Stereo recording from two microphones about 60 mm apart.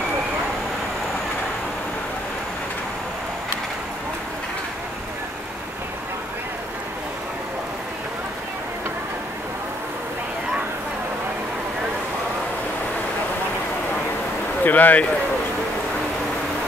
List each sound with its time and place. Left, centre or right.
14.6 s speech: left